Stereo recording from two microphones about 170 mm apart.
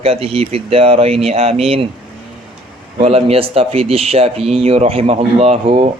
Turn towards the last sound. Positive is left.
turn(degrees=-35)  # may be behind; listen again after turning